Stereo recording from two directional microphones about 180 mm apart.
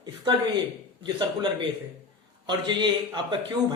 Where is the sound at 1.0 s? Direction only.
25° right (ahead or behind).